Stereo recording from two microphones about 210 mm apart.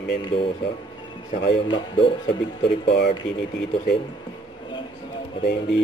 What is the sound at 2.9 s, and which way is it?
Speech, 55° left (ahead or behind).